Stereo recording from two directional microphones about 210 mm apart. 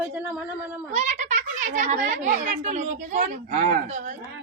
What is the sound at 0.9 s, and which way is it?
A child's voice, 35° right (ahead or behind).